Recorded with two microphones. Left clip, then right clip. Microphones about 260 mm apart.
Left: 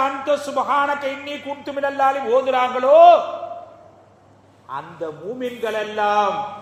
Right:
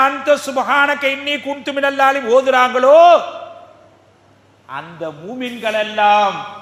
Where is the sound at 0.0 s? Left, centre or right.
Right.